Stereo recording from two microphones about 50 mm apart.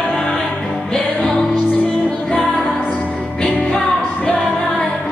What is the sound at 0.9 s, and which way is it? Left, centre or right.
Music, centre.